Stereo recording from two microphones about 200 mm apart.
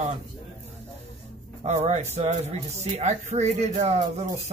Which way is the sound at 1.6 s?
35° right (ahead or behind).